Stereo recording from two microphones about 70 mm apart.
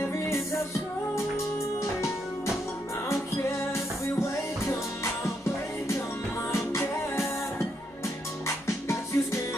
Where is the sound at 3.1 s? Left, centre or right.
Left.